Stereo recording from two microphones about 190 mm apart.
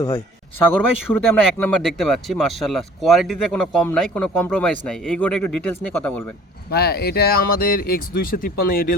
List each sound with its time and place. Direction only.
0.8 s speech: 10° left (ahead or behind)
6.7 s speech: 55° left (ahead or behind)